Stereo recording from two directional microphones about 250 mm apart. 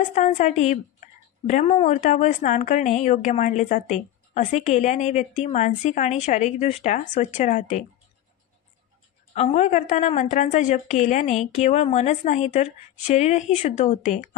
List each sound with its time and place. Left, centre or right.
0.1 s a woman's voice: left
9.3 s a woman's voice: left